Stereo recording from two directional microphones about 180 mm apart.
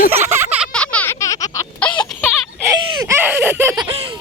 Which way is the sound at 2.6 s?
15° right (ahead or behind).